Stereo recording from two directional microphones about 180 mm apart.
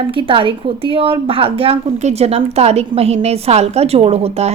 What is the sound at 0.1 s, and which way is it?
A woman's voice, 30° right (ahead or behind).